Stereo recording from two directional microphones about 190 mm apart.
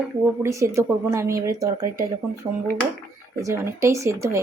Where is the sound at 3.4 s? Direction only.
15° right (ahead or behind).